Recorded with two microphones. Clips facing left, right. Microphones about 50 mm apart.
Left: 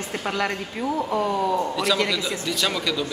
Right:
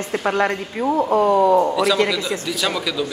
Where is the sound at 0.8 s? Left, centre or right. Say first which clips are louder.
Right 7 dB; right.